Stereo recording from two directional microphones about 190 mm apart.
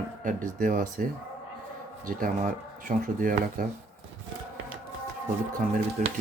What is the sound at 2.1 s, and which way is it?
Speech, 45° right (ahead or behind).